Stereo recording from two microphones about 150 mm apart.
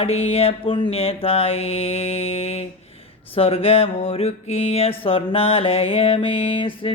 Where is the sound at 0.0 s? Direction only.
40° left (ahead or behind).